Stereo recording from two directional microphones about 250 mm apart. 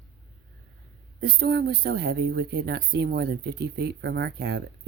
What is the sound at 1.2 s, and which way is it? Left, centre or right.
Speech, right.